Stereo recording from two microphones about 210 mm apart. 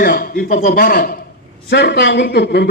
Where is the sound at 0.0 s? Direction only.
45° left (ahead or behind).